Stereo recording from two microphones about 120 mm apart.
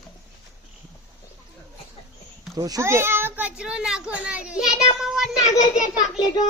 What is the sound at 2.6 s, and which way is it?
A child's voice, 30° right (ahead or behind).